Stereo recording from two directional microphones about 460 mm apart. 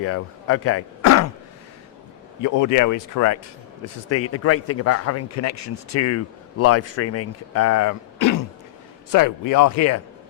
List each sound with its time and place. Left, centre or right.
0.0 s speech: left
2.4 s a man's voice: left